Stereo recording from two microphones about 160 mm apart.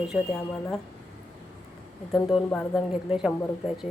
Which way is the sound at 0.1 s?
5° right (ahead or behind).